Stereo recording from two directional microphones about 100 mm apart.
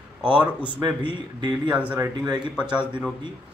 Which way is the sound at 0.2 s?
10° right (ahead or behind).